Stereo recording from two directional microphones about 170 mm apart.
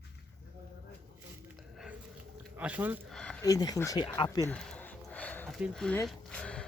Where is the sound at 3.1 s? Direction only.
5° left (ahead or behind).